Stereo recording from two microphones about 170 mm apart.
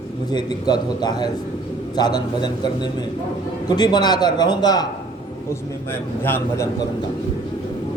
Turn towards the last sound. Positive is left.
turn(degrees=15)  # may be behind; listen again after turning